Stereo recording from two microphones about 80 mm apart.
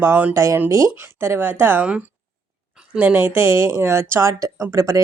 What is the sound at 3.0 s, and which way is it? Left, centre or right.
A woman's voice, right.